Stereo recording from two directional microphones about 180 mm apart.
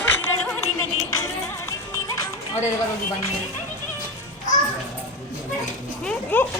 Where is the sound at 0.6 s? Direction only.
15° left (ahead or behind).